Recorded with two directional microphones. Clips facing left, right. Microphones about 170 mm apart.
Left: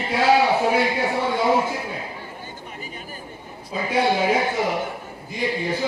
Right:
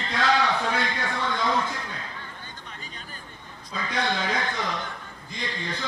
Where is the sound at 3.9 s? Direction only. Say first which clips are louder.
Left 8 dB; 10° left (ahead or behind).